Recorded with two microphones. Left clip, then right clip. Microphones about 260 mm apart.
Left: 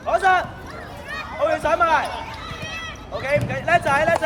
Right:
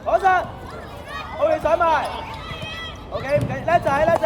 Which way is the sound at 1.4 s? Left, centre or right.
Left.